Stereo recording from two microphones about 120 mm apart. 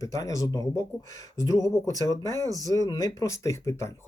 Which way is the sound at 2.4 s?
30° right (ahead or behind).